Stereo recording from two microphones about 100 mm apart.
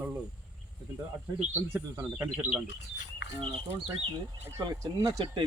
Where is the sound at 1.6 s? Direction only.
20° right (ahead or behind).